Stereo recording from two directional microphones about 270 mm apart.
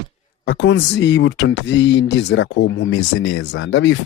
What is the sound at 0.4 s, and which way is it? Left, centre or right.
Speech, left.